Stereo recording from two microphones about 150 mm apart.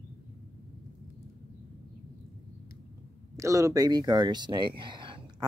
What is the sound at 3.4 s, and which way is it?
Speech, 20° right (ahead or behind).